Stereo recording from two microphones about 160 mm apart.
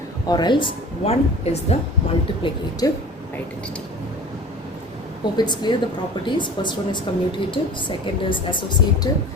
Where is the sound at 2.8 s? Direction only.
25° left (ahead or behind).